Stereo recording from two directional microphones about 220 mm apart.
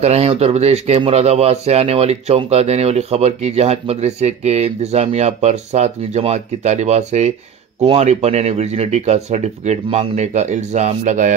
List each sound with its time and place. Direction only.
0.0 s speech: 30° right (ahead or behind)